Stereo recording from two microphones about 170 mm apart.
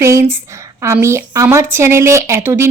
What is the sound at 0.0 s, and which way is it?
Speech, 15° right (ahead or behind).